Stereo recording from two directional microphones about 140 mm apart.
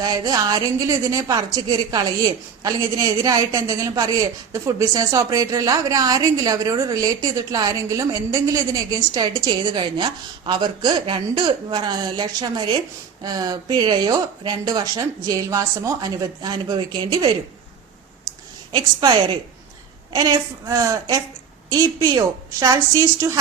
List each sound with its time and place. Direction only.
0.0 s a woman's voice: 30° right (ahead or behind)
18.7 s a woman's voice: 30° right (ahead or behind)